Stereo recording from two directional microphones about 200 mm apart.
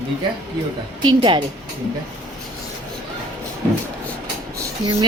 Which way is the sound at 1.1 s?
25° right (ahead or behind).